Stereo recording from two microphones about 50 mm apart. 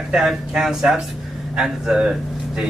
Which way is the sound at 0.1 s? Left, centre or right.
Centre.